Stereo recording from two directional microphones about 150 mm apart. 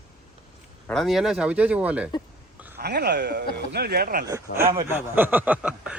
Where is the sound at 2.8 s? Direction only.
90° right.